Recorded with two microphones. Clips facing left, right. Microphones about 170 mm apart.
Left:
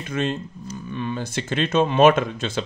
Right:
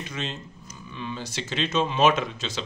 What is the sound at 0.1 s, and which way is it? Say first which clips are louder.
Speech: left 9 dB; 55° left (ahead or behind).